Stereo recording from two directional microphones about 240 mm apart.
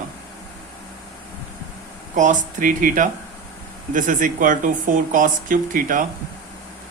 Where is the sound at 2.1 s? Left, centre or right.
Right.